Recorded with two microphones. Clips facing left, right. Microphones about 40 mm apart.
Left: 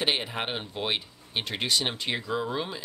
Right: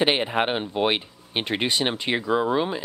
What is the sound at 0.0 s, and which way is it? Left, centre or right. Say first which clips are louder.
Speech: right 7 dB; right.